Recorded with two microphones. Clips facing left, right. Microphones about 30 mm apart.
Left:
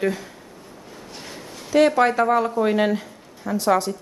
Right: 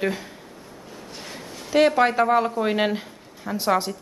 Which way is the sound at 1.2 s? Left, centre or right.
Centre.